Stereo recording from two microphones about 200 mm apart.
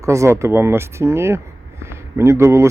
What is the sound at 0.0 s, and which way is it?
Speech, 15° right (ahead or behind).